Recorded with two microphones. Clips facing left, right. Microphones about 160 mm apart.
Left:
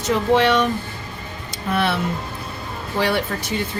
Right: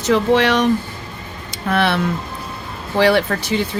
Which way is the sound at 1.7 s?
85° right.